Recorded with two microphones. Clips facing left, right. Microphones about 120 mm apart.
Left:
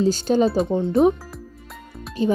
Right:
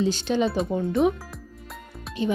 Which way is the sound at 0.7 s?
25° left (ahead or behind).